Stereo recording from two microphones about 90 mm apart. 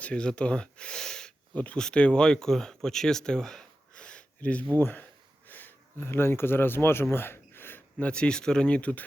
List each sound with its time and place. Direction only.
0.0 s speech: 10° left (ahead or behind)
7.9 s speech: 10° left (ahead or behind)